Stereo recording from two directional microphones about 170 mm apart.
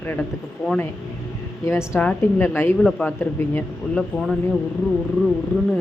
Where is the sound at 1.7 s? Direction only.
15° left (ahead or behind).